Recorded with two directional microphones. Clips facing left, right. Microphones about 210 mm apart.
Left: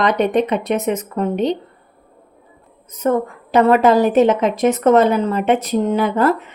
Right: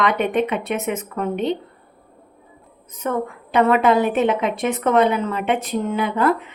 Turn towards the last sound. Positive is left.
turn(degrees=40)  # may be behind; listen again after turning